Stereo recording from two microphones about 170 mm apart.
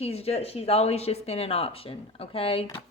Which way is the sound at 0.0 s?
35° left (ahead or behind).